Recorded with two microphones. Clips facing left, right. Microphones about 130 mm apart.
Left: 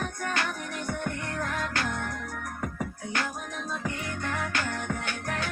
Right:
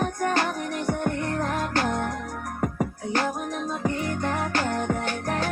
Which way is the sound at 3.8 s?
40° right (ahead or behind).